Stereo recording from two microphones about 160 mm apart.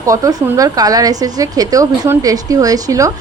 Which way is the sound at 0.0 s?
20° right (ahead or behind).